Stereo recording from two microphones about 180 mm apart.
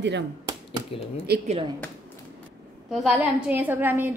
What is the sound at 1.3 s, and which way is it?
Speech, 60° right (ahead or behind).